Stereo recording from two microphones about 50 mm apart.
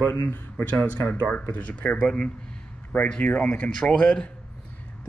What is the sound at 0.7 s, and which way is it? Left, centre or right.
Speech, left.